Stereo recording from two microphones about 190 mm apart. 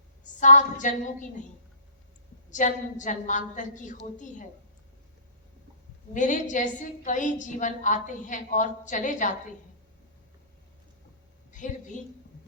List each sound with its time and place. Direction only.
0.3 s a woman's voice: 40° left (ahead or behind)
2.5 s a woman's voice: 40° left (ahead or behind)
6.1 s a woman's voice: 40° left (ahead or behind)
11.5 s a woman's voice: 40° left (ahead or behind)